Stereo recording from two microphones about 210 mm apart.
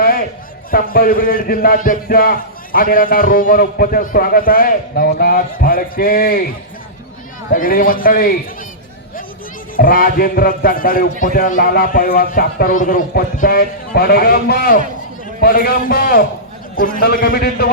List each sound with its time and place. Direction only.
0.0 s a sound: 45° left (ahead or behind)
0.7 s a man's voice: 45° left (ahead or behind)
7.5 s a man's voice: 40° left (ahead or behind)
9.7 s a man's voice: 45° left (ahead or behind)